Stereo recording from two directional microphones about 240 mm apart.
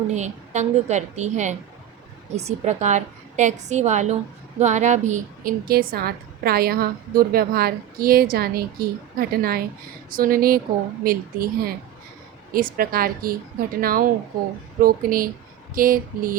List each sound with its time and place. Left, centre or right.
0.1 s a woman's voice: right